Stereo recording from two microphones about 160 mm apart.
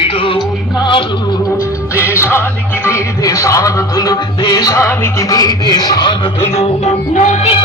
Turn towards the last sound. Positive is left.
turn(degrees=50)  # may be behind; listen again after turning